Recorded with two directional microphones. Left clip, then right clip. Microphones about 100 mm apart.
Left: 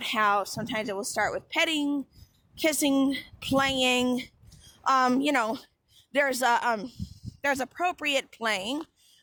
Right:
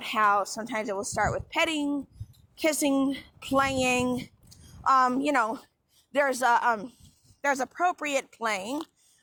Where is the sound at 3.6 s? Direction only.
35° left (ahead or behind).